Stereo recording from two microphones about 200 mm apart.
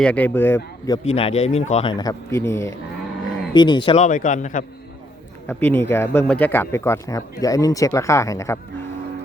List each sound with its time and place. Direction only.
0.0 s speech: 5° left (ahead or behind)
1.0 s speech: 30° left (ahead or behind)
3.9 s speech: 40° left (ahead or behind)
5.5 s speech: 10° left (ahead or behind)